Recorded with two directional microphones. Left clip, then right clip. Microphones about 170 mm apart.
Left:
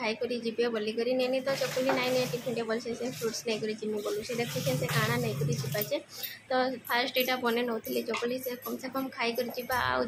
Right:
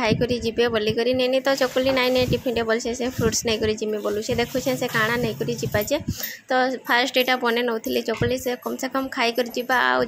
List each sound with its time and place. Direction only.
0.0 s a woman's voice: 45° right (ahead or behind)
4.9 s a woman's voice: 40° right (ahead or behind)